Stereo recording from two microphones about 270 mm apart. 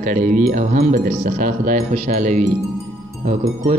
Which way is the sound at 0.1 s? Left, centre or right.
Right.